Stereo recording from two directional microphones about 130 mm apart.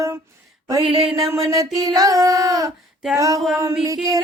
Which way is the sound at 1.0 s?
Centre (ahead or behind).